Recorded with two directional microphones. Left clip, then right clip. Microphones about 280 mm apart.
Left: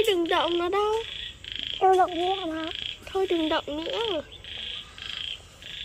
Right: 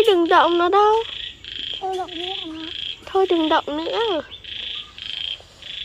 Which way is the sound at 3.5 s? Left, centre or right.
Right.